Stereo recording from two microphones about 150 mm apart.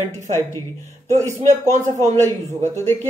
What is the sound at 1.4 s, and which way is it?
Speech, 50° right (ahead or behind).